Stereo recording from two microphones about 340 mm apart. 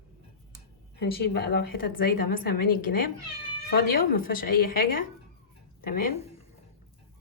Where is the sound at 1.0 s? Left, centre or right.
Left.